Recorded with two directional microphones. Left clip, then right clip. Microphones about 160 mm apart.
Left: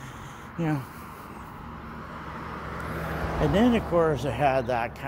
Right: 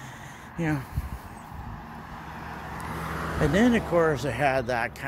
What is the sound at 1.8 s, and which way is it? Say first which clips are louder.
Vehicle: left 4 dB; 70° right (ahead or behind).